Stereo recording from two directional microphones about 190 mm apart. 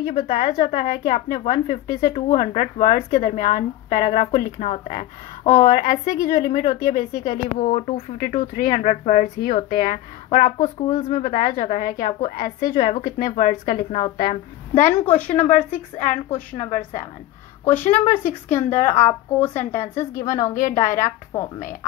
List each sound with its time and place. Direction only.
0.0 s a woman's voice: 35° left (ahead or behind)
17.8 s a woman's voice: 40° left (ahead or behind)
20.0 s a woman's voice: 15° left (ahead or behind)
20.5 s a woman's voice: 40° left (ahead or behind)